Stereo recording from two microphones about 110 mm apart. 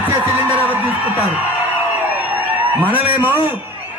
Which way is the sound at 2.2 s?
15° right (ahead or behind).